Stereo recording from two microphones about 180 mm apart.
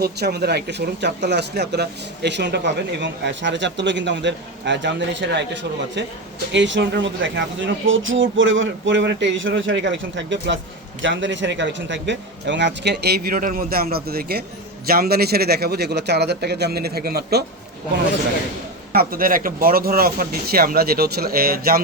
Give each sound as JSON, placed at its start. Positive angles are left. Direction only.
{"t": 0.0, "sound": "speech", "side_deg": -65}
{"t": 6.5, "sound": "speech", "side_deg": -85}
{"t": 18.9, "sound": "speech", "side_deg": -50}